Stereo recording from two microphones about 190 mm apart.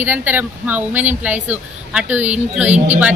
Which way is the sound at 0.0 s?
10° right (ahead or behind).